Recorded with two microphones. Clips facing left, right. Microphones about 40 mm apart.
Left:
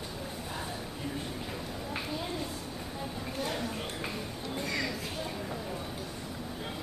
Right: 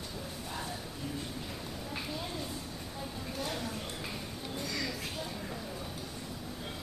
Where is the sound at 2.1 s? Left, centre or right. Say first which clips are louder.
Left 3 dB; centre.